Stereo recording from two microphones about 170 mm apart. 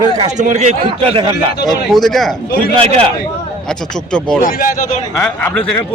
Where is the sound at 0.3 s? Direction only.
45° right (ahead or behind).